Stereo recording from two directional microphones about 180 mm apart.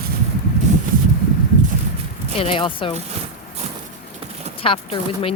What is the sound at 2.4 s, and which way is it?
Speech, 30° left (ahead or behind).